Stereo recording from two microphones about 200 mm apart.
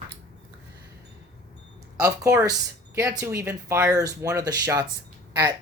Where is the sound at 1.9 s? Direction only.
15° right (ahead or behind).